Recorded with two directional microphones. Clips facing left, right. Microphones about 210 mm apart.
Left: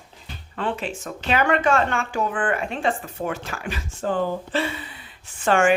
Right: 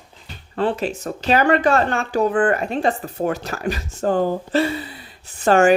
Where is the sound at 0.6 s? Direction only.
40° right (ahead or behind).